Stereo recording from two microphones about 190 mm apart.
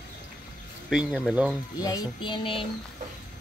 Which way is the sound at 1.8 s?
20° left (ahead or behind).